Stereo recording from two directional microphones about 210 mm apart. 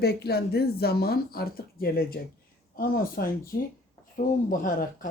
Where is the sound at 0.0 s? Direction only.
50° left (ahead or behind).